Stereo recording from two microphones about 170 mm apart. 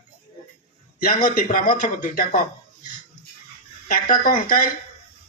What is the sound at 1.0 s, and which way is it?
A man's voice, 55° left (ahead or behind).